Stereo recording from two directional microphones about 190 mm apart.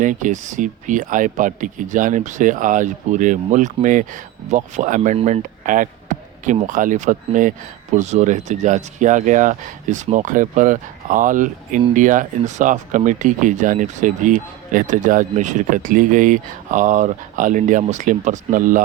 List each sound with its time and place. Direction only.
0.0 s speech: 40° right (ahead or behind)